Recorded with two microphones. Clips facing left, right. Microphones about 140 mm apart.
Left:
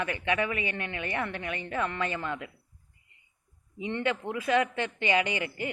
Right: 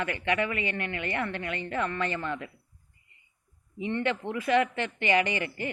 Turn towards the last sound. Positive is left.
turn(degrees=15)  # may be behind; listen again after turning